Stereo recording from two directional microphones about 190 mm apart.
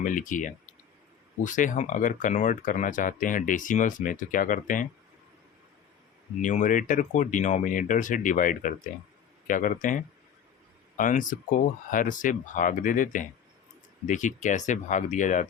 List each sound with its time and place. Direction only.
0.0 s speech: 45° left (ahead or behind)
6.4 s speech: 45° left (ahead or behind)